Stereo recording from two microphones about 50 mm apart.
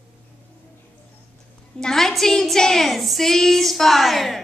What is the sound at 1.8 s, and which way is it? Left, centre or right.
A woman's voice, centre.